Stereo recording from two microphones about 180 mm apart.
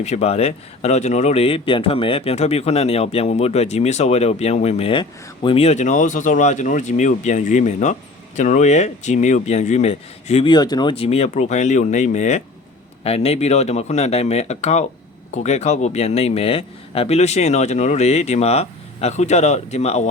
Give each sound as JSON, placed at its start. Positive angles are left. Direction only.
{"t": 0.0, "sound": "speech", "side_deg": 35}